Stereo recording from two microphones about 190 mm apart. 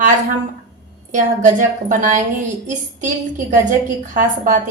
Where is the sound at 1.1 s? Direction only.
40° right (ahead or behind).